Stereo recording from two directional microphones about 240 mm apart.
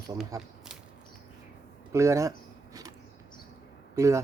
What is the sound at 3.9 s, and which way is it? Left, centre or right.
Speech, centre.